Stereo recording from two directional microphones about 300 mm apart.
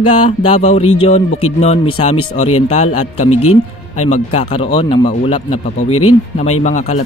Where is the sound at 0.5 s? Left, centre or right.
Left.